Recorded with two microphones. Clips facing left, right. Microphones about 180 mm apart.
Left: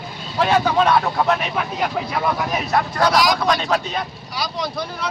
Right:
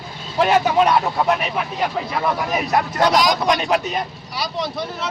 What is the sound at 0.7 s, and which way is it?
Speech, 15° right (ahead or behind).